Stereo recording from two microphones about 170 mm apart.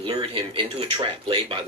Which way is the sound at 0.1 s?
30° right (ahead or behind).